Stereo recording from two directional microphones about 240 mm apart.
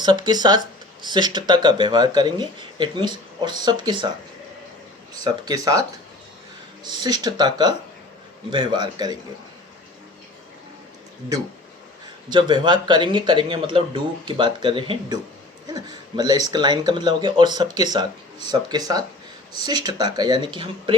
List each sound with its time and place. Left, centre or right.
0.0 s speech: centre
5.2 s speech: centre
6.8 s speech: centre
12.3 s speech: centre